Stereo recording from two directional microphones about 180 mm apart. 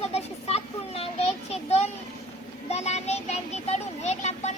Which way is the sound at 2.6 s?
35° left (ahead or behind).